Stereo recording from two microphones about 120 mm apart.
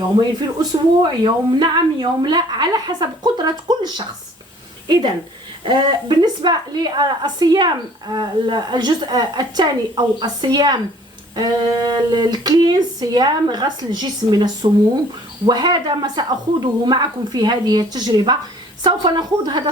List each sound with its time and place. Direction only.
0.2 s a woman's voice: 35° right (ahead or behind)